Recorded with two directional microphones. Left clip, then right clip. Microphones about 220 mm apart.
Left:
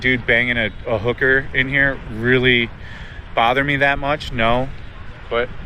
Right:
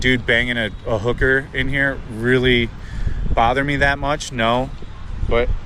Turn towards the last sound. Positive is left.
turn(degrees=-20)  # may be behind; listen again after turning